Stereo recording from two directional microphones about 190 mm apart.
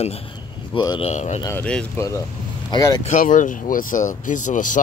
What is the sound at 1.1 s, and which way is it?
Speech, 35° left (ahead or behind).